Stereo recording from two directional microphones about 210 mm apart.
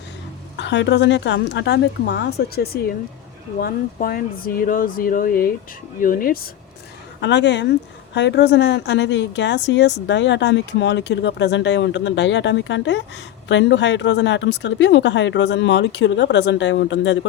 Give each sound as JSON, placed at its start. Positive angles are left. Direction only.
{"t": 0.5, "sound": "a woman's voice", "side_deg": 60}
{"t": 7.2, "sound": "a woman's voice", "side_deg": 55}